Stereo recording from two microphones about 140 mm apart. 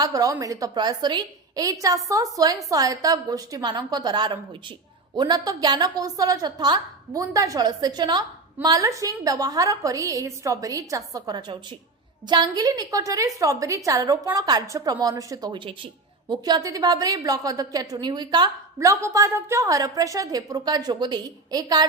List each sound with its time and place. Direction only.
0.0 s a woman's voice: 25° right (ahead or behind)